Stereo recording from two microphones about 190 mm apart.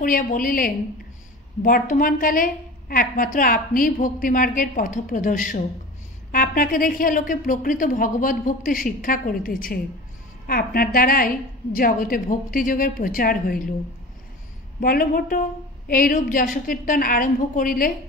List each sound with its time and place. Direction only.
0.0 s a woman's voice: 45° left (ahead or behind)
14.8 s a woman's voice: 50° left (ahead or behind)